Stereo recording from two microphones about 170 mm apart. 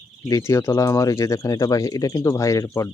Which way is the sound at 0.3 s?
20° left (ahead or behind).